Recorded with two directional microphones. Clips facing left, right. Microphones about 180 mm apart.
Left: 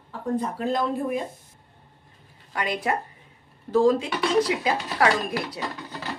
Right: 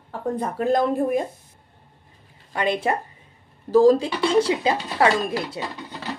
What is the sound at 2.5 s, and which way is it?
Speech, 25° right (ahead or behind).